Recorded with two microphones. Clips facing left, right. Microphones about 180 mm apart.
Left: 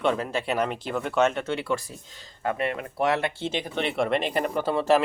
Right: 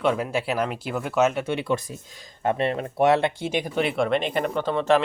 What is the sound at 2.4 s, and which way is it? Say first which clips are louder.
Speech: right 4 dB; 30° right (ahead or behind).